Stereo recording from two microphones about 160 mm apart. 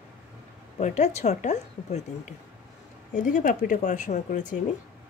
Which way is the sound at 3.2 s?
55° left (ahead or behind).